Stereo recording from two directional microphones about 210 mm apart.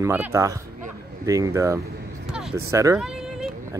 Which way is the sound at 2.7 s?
15° right (ahead or behind).